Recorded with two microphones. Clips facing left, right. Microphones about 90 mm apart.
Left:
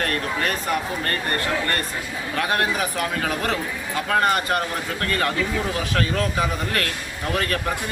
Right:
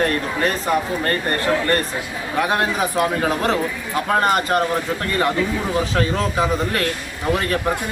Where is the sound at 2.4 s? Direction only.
20° right (ahead or behind).